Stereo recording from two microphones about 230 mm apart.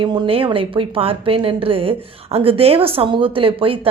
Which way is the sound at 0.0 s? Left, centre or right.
Centre.